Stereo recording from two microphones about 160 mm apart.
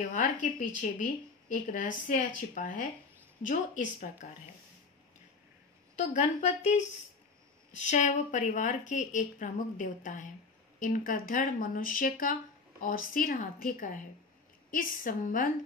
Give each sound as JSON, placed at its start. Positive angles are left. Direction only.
{"t": 0.0, "sound": "a woman's voice", "side_deg": 55}
{"t": 5.9, "sound": "a woman's voice", "side_deg": 45}